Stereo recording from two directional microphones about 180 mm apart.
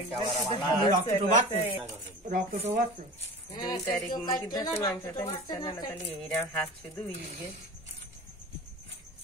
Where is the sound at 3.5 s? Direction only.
25° left (ahead or behind).